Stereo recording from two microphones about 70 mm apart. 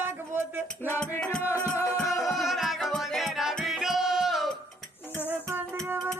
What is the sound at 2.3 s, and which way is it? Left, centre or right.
Music, centre.